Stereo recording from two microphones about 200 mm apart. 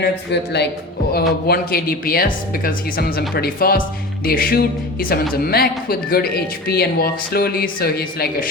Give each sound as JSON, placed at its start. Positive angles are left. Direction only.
{"t": 0.0, "sound": "a man's voice", "side_deg": 55}